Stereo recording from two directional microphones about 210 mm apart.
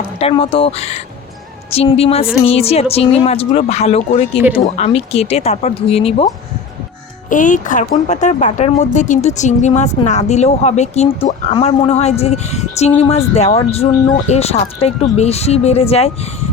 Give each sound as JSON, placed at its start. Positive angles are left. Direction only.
{"t": 0.2, "sound": "speech", "side_deg": 25}